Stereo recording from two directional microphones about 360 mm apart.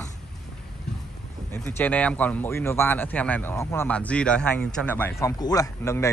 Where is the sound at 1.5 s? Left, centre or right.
Centre.